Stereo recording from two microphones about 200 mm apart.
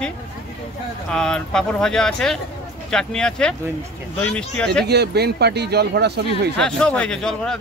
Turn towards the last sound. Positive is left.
turn(degrees=5)  # may be behind; listen again after turning